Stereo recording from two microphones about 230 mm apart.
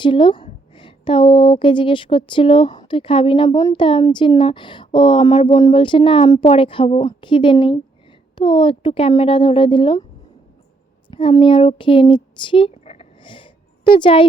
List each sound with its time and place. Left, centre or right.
0.0 s a woman's voice: left
11.1 s speech: left